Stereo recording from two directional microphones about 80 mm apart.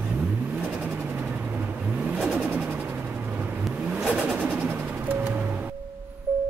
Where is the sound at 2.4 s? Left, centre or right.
Centre.